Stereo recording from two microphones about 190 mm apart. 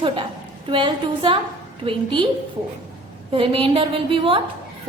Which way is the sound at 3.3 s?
30° right (ahead or behind).